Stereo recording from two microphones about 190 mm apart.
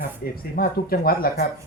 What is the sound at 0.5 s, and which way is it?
Speech, 50° left (ahead or behind).